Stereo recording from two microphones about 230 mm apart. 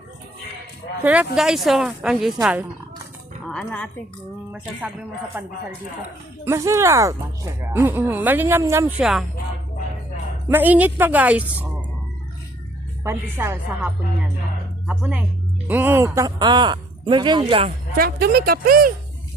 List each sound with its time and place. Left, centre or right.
1.0 s speech: centre
10.5 s speech: centre
13.1 s speech: centre
17.9 s a woman's voice: right